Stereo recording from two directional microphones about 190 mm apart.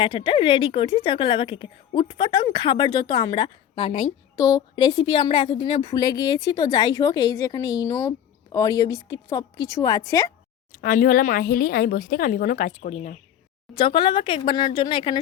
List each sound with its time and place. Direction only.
0.0 s speech: 25° left (ahead or behind)
10.7 s speech: 45° left (ahead or behind)
13.7 s speech: 25° left (ahead or behind)